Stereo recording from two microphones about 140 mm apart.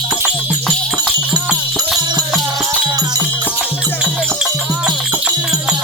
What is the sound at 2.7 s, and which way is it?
Music, 25° right (ahead or behind).